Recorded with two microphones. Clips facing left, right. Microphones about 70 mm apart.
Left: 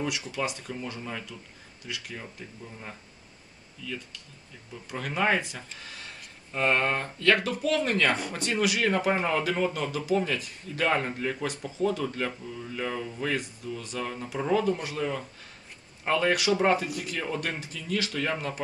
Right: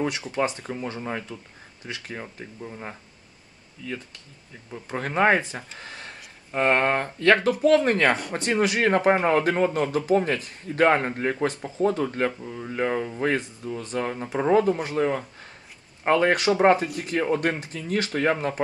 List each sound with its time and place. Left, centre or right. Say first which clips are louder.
0.0 s speech: right 5 dB; right
4.8 s speech: right 6 dB; right
5.8 s a sound: right 4 dB; right
7.2 s speech: right 5 dB; right